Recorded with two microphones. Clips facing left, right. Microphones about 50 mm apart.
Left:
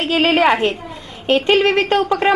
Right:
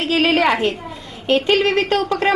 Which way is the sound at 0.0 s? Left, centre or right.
Left.